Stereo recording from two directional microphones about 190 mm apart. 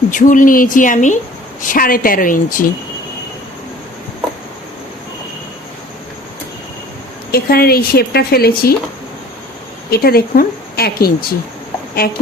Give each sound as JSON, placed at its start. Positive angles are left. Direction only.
{"t": 0.1, "sound": "a woman's voice", "side_deg": 45}
{"t": 7.3, "sound": "a woman's voice", "side_deg": 55}
{"t": 9.9, "sound": "a woman's voice", "side_deg": 55}